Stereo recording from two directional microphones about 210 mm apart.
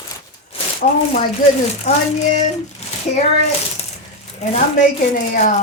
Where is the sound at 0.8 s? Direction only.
40° left (ahead or behind).